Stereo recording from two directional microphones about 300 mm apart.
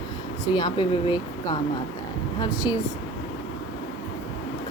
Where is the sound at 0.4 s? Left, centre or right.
Centre.